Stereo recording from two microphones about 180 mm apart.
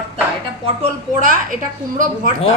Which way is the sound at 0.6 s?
35° right (ahead or behind).